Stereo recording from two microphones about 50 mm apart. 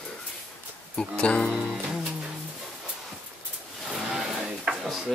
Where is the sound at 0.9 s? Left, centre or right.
Left.